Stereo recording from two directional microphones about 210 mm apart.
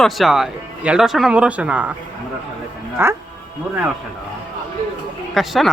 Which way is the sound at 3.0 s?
10° right (ahead or behind).